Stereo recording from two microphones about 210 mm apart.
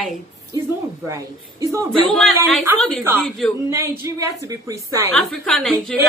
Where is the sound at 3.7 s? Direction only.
10° right (ahead or behind).